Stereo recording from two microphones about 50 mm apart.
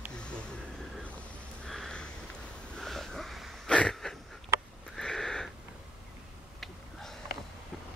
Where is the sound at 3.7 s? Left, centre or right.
Left.